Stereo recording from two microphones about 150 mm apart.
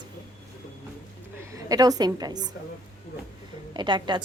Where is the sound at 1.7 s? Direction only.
25° right (ahead or behind).